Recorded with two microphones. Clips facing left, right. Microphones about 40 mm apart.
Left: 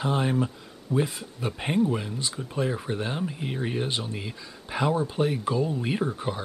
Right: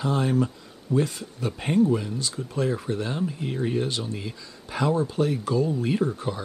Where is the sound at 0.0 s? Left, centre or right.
Centre.